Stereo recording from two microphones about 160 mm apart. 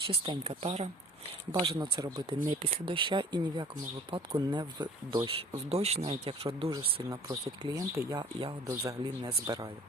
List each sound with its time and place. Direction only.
0.1 s speech: 35° right (ahead or behind)
1.5 s speech: 25° right (ahead or behind)
6.7 s speech: 20° right (ahead or behind)
8.6 s speech: 20° right (ahead or behind)